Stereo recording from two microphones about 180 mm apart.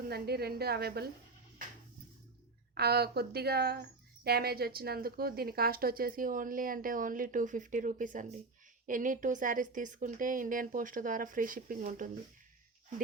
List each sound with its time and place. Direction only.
0.1 s speech: 60° right (ahead or behind)
2.7 s a woman's voice: 60° right (ahead or behind)